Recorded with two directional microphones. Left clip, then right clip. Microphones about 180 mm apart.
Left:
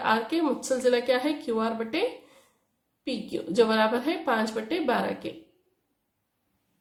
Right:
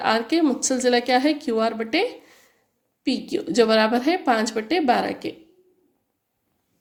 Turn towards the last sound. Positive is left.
turn(degrees=-35)  # may be behind; listen again after turning